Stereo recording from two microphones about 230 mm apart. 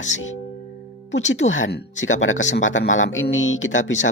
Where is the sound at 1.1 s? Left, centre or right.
Left.